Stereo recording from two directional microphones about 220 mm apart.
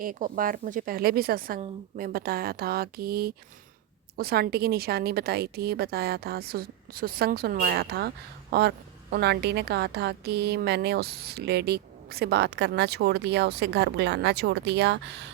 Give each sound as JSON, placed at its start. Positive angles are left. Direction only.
{"t": 0.0, "sound": "a woman's voice", "side_deg": -40}